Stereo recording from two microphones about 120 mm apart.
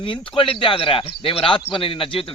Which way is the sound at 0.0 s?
45° left (ahead or behind).